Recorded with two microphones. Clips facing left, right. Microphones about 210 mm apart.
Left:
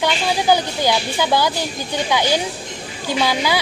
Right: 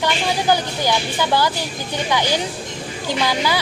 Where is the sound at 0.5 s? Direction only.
15° left (ahead or behind).